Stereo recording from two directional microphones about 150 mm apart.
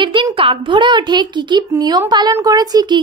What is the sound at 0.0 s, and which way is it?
Speech, 35° right (ahead or behind).